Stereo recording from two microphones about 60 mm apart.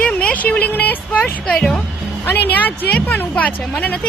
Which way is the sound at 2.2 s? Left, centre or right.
Left.